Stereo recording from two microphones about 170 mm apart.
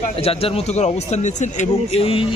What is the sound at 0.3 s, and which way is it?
Speech, 35° left (ahead or behind).